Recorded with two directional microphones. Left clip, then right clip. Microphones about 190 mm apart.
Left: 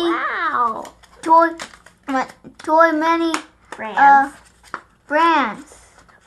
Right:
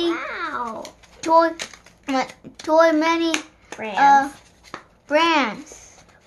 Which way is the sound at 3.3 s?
60° right (ahead or behind).